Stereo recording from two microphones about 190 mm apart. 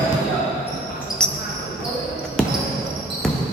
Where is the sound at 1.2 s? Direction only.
5° left (ahead or behind).